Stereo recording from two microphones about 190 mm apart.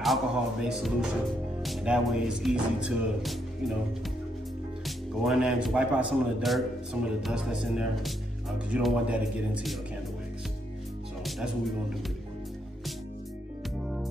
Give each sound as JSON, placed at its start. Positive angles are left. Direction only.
{"t": 0.0, "sound": "speech", "side_deg": 0}
{"t": 4.8, "sound": "speech", "side_deg": 0}
{"t": 11.2, "sound": "speech", "side_deg": 0}